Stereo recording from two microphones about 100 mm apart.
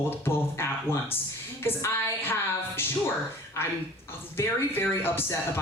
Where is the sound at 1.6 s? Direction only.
25° left (ahead or behind).